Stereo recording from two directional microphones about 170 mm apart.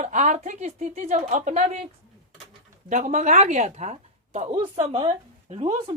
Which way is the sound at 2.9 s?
50° right (ahead or behind).